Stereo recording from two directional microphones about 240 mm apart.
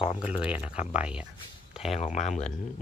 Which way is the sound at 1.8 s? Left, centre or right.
Left.